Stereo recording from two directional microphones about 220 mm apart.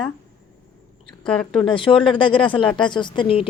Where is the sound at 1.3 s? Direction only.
5° left (ahead or behind).